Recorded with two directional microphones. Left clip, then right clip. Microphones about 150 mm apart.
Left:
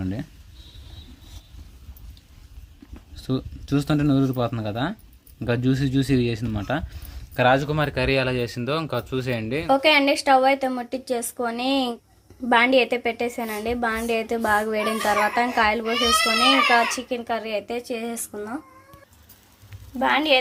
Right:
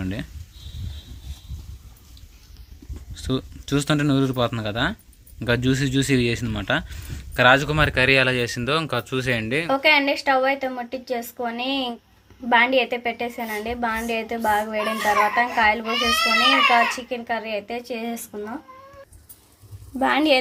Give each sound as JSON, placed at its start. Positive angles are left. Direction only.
{"t": 0.0, "sound": "speech", "side_deg": 5}
{"t": 3.2, "sound": "a man's voice", "side_deg": 0}
{"t": 9.7, "sound": "a woman's voice", "side_deg": 20}
{"t": 20.0, "sound": "a woman's voice", "side_deg": -20}